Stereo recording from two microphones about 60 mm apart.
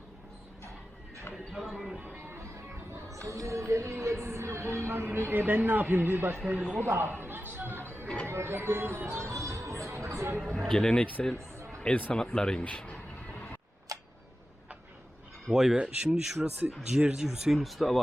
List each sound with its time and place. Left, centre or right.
1.3 s a sound: centre
2.0 s music: right
3.1 s music: right
8.0 s a sound: left
8.3 s music: right
10.4 s speech: centre
13.9 s tick-tock: right
15.4 s speech: centre
15.7 s speech: right
16.2 s speech: centre